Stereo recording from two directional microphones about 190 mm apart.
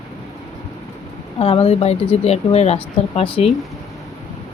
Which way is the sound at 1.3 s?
30° left (ahead or behind).